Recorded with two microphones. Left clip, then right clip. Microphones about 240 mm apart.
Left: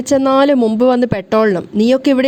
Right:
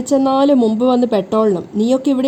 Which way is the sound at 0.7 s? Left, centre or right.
Left.